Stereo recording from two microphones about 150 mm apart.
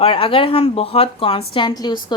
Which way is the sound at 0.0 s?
35° left (ahead or behind).